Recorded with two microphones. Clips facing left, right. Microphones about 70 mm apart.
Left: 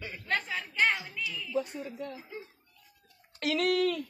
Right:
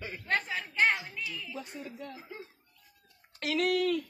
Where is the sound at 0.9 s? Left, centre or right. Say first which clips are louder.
Even; right.